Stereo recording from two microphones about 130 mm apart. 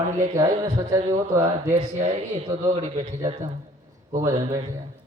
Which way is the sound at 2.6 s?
60° right (ahead or behind).